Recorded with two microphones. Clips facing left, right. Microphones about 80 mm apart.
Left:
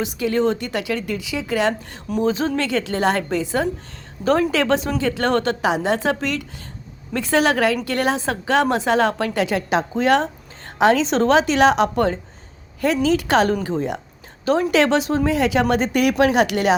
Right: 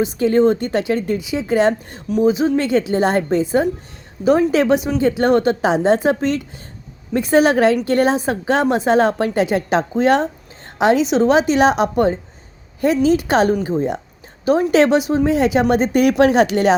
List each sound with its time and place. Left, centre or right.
0.2 s speech: right
2.2 s speech: centre
2.6 s speech: right
11.3 s speech: right